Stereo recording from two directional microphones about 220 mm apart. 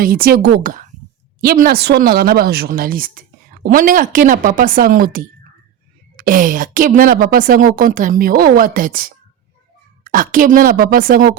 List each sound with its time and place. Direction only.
0.0 s speech: 40° right (ahead or behind)